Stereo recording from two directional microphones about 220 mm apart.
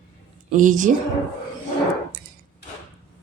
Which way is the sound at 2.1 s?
40° right (ahead or behind).